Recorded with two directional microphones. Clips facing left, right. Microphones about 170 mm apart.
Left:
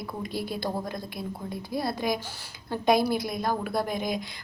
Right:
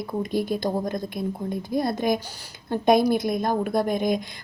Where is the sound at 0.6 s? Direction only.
20° right (ahead or behind).